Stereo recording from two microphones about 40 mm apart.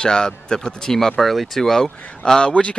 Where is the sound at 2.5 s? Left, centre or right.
Left.